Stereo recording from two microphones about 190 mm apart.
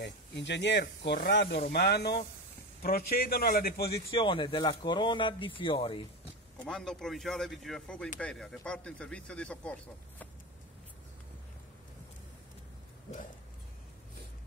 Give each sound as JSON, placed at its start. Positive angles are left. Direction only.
{"t": 0.0, "sound": "a man's voice", "side_deg": 65}
{"t": 4.1, "sound": "speech", "side_deg": 25}
{"t": 6.6, "sound": "speech", "side_deg": 5}